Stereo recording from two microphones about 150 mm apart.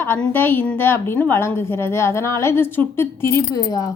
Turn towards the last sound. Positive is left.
turn(degrees=25)  # may be behind; listen again after turning